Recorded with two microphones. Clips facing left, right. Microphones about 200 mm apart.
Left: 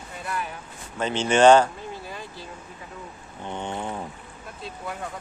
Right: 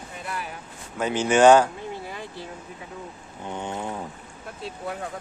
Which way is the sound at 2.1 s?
60° right (ahead or behind).